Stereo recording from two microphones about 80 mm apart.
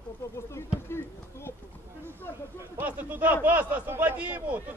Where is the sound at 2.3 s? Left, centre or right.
Left.